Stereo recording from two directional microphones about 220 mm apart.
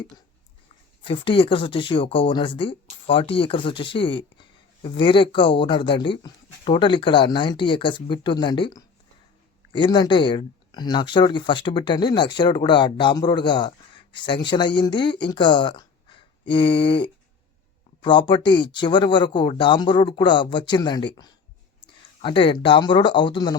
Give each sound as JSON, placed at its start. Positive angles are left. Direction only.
{"t": 1.0, "sound": "speech", "side_deg": 25}